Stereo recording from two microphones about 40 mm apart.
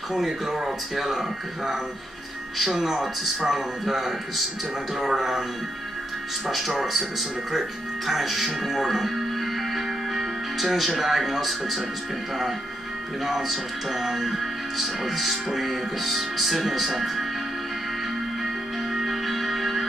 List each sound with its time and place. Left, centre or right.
0.1 s speech: centre
2.6 s speech: centre
6.4 s speech: centre
9.8 s music: centre
13.2 s speech: centre
18.9 s music: centre